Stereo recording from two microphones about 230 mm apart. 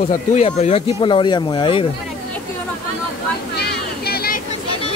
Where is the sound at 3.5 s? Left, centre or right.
Left.